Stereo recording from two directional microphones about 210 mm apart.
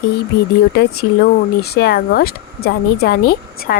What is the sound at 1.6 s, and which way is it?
Speech, 50° left (ahead or behind).